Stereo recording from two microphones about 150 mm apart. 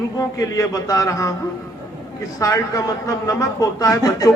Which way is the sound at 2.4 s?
20° left (ahead or behind).